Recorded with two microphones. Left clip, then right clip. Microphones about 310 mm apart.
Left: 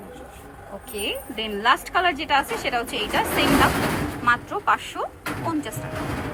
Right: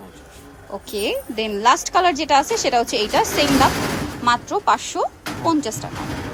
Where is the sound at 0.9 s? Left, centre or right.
Centre.